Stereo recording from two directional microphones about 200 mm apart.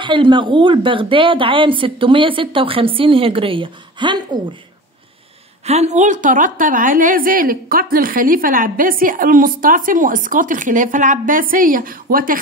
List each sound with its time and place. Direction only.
0.0 s a woman's voice: 25° right (ahead or behind)
5.7 s a woman's voice: 35° right (ahead or behind)